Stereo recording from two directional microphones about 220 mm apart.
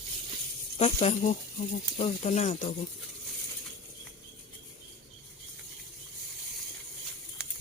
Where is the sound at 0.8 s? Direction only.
30° left (ahead or behind).